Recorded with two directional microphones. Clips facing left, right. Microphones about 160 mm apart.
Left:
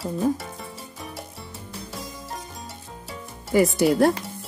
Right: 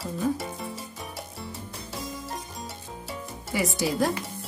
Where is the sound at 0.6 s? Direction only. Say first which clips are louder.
Right 2 dB; centre (ahead or behind).